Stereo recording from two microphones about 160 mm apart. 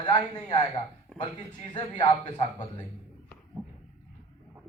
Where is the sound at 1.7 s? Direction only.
30° left (ahead or behind).